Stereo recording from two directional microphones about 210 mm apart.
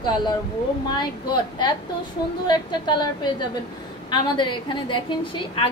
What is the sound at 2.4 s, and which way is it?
A woman's voice, 20° left (ahead or behind).